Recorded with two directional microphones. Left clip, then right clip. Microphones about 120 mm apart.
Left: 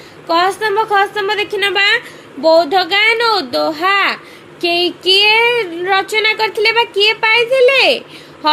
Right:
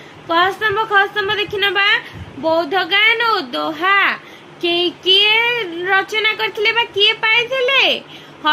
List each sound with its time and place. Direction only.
0.3 s speech: 55° left (ahead or behind)